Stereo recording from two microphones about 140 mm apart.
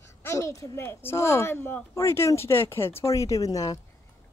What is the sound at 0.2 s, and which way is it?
Speech, 20° left (ahead or behind).